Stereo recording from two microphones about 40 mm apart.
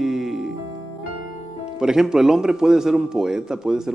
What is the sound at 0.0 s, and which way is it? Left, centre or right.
Music, centre.